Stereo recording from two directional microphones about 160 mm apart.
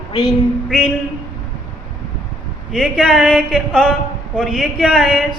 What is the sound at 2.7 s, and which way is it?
A man's voice, 5° right (ahead or behind).